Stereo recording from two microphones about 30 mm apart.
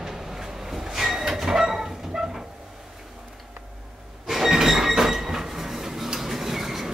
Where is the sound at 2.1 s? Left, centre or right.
Centre.